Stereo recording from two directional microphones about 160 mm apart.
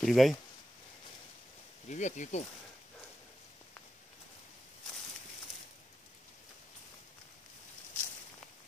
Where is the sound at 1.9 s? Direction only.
50° left (ahead or behind).